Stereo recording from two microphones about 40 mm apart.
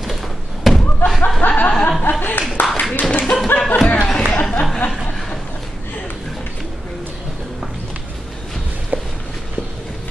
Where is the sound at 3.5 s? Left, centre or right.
Left.